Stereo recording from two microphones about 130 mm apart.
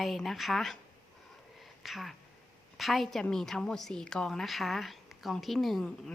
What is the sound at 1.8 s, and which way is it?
A woman's voice, centre (ahead or behind).